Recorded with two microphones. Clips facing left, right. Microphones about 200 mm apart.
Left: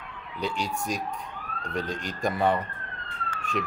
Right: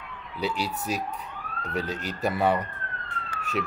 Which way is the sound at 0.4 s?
5° right (ahead or behind).